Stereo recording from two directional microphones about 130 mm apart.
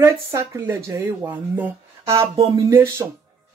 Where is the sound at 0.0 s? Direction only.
20° right (ahead or behind).